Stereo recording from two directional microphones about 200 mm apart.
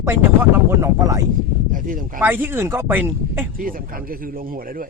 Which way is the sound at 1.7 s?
40° right (ahead or behind).